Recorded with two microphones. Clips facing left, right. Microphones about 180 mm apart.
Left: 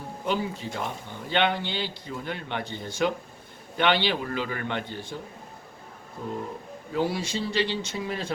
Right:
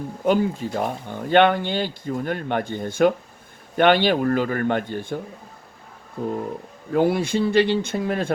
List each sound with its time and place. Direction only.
0.3 s speech: 50° right (ahead or behind)
6.9 s speech: 55° right (ahead or behind)